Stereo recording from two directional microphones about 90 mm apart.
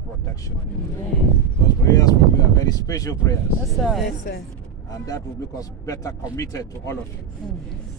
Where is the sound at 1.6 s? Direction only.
45° left (ahead or behind).